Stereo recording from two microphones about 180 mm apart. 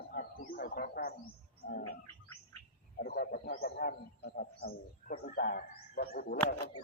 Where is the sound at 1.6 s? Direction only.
45° left (ahead or behind).